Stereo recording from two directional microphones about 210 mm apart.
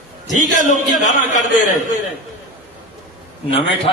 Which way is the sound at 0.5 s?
35° left (ahead or behind).